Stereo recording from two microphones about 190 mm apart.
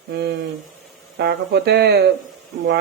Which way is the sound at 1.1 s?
60° right (ahead or behind).